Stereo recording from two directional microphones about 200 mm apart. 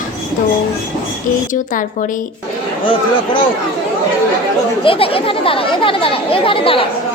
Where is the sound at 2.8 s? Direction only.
25° left (ahead or behind).